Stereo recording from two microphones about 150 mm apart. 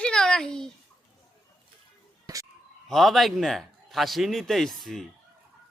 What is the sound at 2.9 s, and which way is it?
Speech, centre (ahead or behind).